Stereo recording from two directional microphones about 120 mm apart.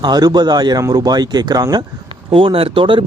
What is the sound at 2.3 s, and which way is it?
Speech, 50° right (ahead or behind).